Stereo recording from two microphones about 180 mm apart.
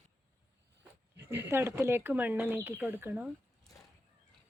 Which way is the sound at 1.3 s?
10° right (ahead or behind).